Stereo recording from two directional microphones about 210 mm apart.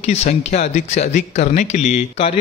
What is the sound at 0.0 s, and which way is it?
Speech, 30° left (ahead or behind).